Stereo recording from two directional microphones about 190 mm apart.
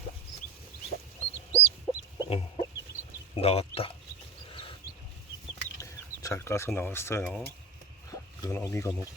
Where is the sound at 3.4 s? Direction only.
30° left (ahead or behind).